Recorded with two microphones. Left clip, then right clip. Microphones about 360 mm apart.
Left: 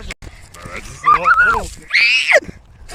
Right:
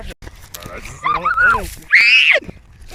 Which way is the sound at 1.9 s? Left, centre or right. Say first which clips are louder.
Right 3 dB; centre.